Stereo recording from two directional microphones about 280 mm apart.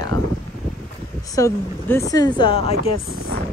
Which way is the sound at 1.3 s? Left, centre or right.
Centre.